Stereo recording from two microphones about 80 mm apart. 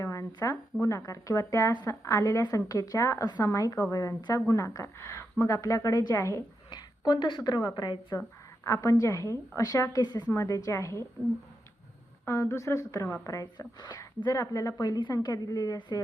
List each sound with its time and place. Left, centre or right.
0.0 s a sound: left
0.5 s a woman's voice: left
6.7 s a woman's voice: left
8.6 s speech: left
10.3 s a woman's voice: left
12.2 s a woman's voice: left
14.3 s speech: left